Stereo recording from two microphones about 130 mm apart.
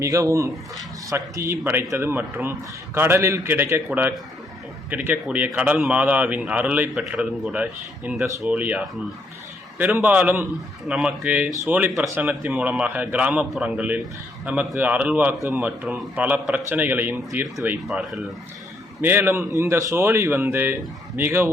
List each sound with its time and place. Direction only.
0.0 s a man's voice: 25° right (ahead or behind)
17.7 s speech: centre (ahead or behind)
19.0 s a man's voice: 15° right (ahead or behind)